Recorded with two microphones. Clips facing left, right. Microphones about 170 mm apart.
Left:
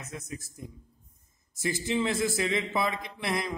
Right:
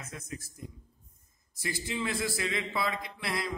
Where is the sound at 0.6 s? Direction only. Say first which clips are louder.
Left 2 dB; 25° left (ahead or behind).